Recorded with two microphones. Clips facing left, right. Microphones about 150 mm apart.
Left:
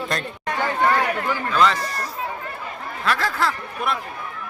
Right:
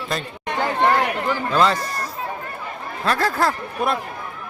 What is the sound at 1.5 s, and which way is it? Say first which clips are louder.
Speech: right 1 dB; 35° right (ahead or behind).